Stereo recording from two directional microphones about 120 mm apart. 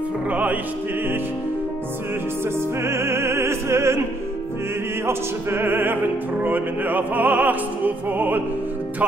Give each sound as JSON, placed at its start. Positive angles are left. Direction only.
{"t": 0.3, "sound": "music", "side_deg": -10}
{"t": 2.8, "sound": "opera", "side_deg": -20}
{"t": 5.0, "sound": "opera", "side_deg": -20}